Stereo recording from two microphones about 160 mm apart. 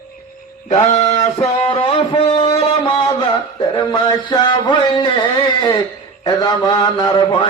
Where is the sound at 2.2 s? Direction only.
35° left (ahead or behind).